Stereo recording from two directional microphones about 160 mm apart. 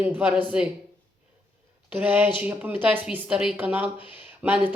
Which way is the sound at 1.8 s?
10° right (ahead or behind).